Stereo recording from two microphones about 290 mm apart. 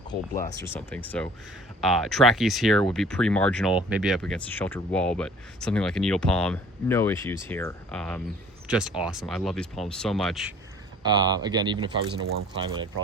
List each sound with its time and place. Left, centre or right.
0.6 s speech: centre
11.0 s speech: centre